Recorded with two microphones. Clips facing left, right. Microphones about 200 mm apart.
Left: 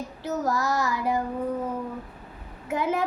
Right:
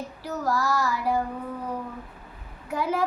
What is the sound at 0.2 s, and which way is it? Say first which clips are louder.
Child singing: left 1 dB; 20° left (ahead or behind).